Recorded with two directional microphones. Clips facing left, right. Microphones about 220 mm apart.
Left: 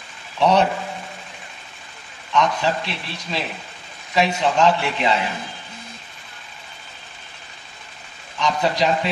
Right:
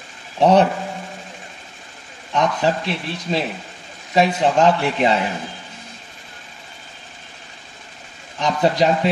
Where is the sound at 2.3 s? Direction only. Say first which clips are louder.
Right 1 dB; 45° right (ahead or behind).